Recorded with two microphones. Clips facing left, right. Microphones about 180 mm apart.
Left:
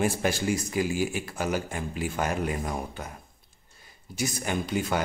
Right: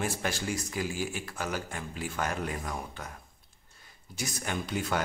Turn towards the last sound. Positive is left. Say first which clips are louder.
# left 4 dB
turn(degrees=5)  # may be behind; listen again after turning